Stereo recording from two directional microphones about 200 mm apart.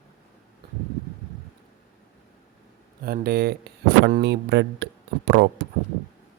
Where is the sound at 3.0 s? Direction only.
50° right (ahead or behind).